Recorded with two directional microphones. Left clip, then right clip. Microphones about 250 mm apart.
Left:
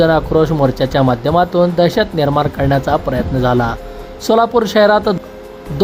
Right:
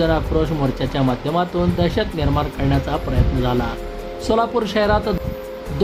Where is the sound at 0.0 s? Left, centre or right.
Left.